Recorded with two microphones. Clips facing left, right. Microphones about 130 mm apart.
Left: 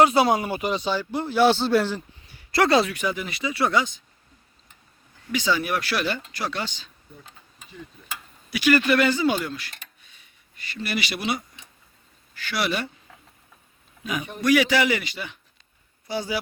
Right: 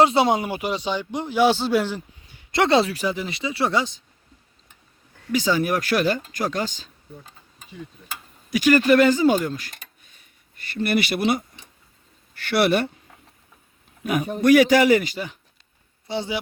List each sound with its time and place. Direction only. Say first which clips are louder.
0.0 s a man's voice: right 1 dB; 25° right (ahead or behind)
5.3 s speech: right 3 dB; 40° right (ahead or behind)
8.4 s speech: right 4 dB; 40° right (ahead or behind)
12.5 s speech: right 7 dB; 60° right (ahead or behind)
14.0 s a man's voice: right 6 dB; 55° right (ahead or behind)
16.0 s a man's voice: right 1 dB; 25° right (ahead or behind)